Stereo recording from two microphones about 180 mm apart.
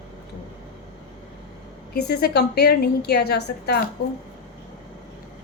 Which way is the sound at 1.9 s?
65° left (ahead or behind).